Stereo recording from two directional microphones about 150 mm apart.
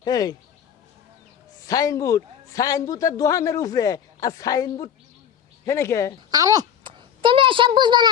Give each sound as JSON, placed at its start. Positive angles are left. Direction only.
{"t": 0.0, "sound": "a man's voice", "side_deg": 25}
{"t": 1.6, "sound": "a man's voice", "side_deg": 25}
{"t": 6.3, "sound": "a sound", "side_deg": -25}